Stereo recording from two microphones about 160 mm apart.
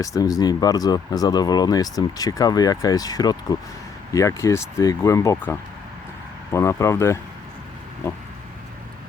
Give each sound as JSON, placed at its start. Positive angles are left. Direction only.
{"t": 0.0, "sound": "speech", "side_deg": 20}